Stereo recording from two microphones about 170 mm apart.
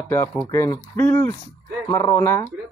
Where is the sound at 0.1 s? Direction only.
10° left (ahead or behind).